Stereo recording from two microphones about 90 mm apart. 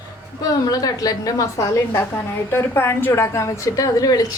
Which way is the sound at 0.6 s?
45° left (ahead or behind).